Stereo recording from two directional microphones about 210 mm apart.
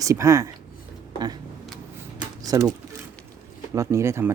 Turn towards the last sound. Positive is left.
turn(degrees=-10)  # may be behind; listen again after turning